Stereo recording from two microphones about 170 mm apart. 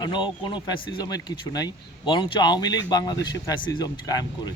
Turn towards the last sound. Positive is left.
turn(degrees=20)  # may be behind; listen again after turning